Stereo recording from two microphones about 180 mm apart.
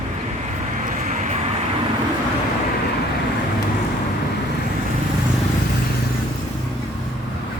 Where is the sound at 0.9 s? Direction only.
45° right (ahead or behind).